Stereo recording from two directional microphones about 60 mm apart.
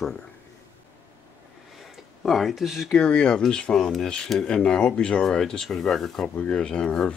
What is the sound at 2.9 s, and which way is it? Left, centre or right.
Speech, centre.